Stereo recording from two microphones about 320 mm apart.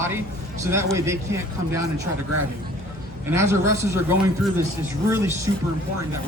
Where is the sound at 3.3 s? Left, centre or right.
Centre.